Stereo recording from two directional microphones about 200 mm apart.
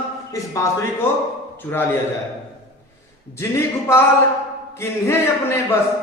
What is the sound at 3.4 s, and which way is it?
Speech, 15° left (ahead or behind).